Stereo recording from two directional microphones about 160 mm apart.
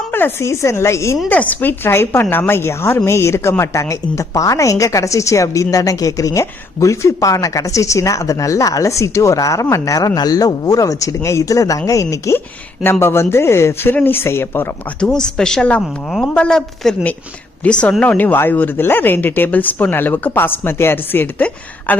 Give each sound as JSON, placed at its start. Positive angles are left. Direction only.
{"t": 0.1, "sound": "a woman's voice", "side_deg": 15}